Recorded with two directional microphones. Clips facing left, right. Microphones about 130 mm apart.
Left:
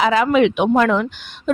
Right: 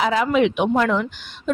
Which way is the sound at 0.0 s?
90° left.